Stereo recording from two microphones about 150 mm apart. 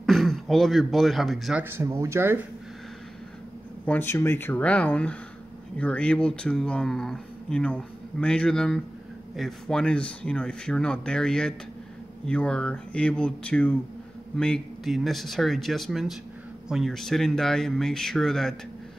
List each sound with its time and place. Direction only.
0.0 s speech: centre (ahead or behind)
1.6 s speech: 15° right (ahead or behind)
3.8 s speech: 15° left (ahead or behind)